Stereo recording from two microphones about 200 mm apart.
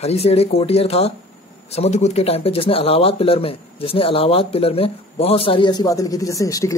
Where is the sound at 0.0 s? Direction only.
30° left (ahead or behind).